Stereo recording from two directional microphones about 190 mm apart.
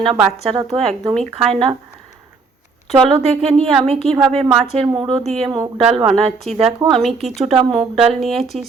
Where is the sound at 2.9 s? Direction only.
30° right (ahead or behind).